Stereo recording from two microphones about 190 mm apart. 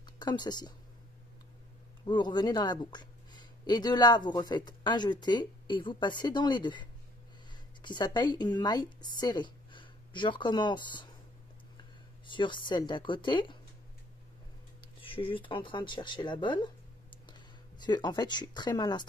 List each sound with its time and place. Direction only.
0.2 s speech: 20° left (ahead or behind)
2.0 s speech: 25° left (ahead or behind)
12.3 s speech: 25° left (ahead or behind)
14.8 s speech: 30° left (ahead or behind)
17.8 s speech: 20° left (ahead or behind)